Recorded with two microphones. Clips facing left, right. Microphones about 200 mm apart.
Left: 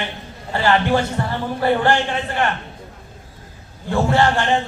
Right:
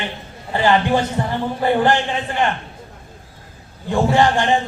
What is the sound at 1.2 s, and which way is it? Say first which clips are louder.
Speech: right 2 dB; 15° right (ahead or behind).